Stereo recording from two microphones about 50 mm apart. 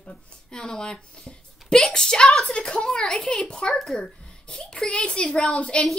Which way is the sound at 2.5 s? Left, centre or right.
Centre.